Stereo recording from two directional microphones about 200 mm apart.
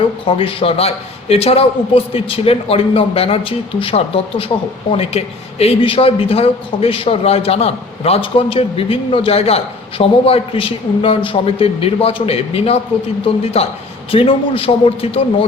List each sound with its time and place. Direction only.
0.0 s a man's voice: 25° left (ahead or behind)